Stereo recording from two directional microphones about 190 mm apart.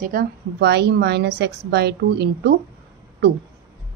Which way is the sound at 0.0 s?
50° right (ahead or behind).